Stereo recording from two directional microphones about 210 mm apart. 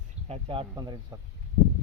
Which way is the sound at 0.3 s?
25° right (ahead or behind).